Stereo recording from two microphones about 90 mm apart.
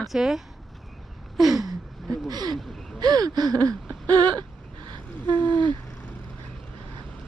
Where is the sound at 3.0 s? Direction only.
50° right (ahead or behind).